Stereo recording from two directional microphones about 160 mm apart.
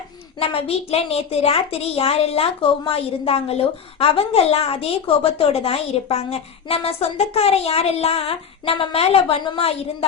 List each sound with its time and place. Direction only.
0.3 s a woman's voice: 40° left (ahead or behind)